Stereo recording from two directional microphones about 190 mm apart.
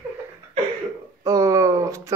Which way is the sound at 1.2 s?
15° right (ahead or behind).